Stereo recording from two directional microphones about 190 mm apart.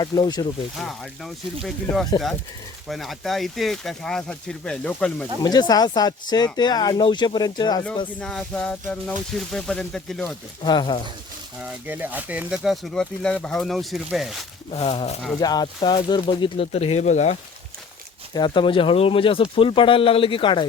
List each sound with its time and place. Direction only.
0.0 s speech: 20° left (ahead or behind)
0.8 s speech: centre (ahead or behind)
5.4 s speech: 20° left (ahead or behind)
8.2 s speech: 5° left (ahead or behind)
10.6 s speech: 20° left (ahead or behind)
11.6 s speech: 10° right (ahead or behind)
14.7 s speech: 30° left (ahead or behind)
15.4 s speech: 20° left (ahead or behind); by 17.3 s 40° left (ahead or behind)
18.3 s speech: 25° left (ahead or behind)